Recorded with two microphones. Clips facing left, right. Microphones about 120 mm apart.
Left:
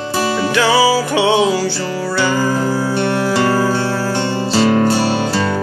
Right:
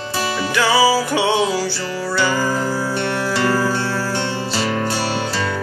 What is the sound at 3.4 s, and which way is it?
Music, 40° left (ahead or behind).